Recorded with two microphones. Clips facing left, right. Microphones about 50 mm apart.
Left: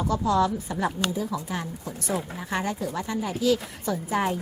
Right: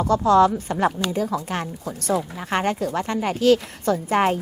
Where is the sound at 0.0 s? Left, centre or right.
Right.